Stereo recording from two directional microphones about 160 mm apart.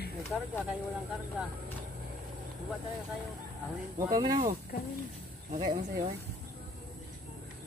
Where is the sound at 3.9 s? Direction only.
25° right (ahead or behind).